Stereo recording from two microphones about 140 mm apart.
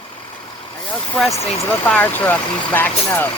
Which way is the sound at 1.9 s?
10° left (ahead or behind).